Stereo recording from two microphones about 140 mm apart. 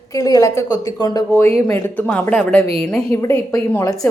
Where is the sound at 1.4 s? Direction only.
15° left (ahead or behind).